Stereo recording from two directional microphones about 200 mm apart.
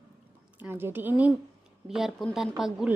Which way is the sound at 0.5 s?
10° right (ahead or behind).